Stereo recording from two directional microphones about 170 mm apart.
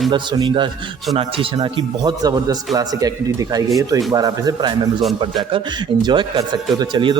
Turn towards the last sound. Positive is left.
turn(degrees=-30)  # may be behind; listen again after turning